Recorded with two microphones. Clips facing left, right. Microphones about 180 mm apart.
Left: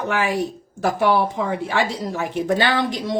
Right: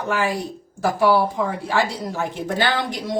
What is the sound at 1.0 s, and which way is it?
Speech, 20° left (ahead or behind).